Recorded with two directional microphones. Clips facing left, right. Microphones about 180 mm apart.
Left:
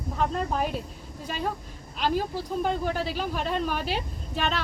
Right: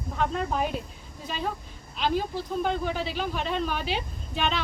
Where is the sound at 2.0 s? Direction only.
5° left (ahead or behind).